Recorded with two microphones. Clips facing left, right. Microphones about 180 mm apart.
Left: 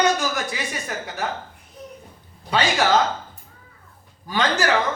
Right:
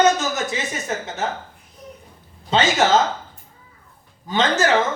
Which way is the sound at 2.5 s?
20° right (ahead or behind).